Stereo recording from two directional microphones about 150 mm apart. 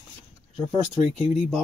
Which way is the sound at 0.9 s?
Centre (ahead or behind).